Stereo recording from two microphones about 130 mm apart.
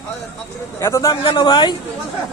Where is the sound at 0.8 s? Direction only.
20° left (ahead or behind).